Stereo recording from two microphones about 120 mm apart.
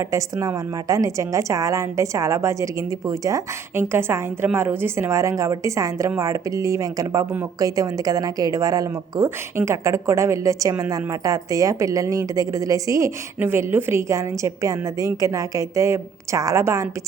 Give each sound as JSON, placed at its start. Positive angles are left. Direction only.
{"t": 0.0, "sound": "a woman's voice", "side_deg": -25}